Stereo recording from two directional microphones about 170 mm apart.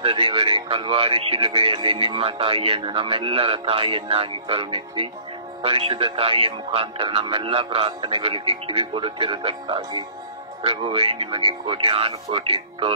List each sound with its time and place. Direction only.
0.0 s speech: 35° right (ahead or behind)